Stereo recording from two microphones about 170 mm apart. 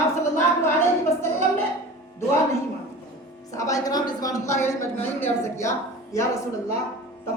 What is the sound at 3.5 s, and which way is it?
Speech, 20° left (ahead or behind).